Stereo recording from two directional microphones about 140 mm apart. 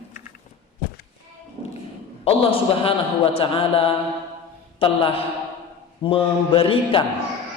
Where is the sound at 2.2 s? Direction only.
40° left (ahead or behind).